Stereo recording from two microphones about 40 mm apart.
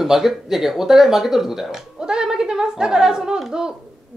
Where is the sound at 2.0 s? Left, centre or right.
Centre.